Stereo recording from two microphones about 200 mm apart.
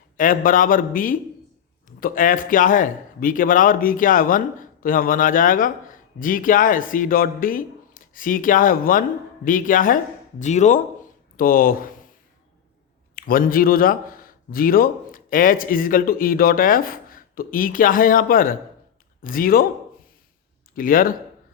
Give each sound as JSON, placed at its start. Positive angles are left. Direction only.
{"t": 0.2, "sound": "speech", "side_deg": 40}
{"t": 13.1, "sound": "speech", "side_deg": 45}
{"t": 20.7, "sound": "speech", "side_deg": 45}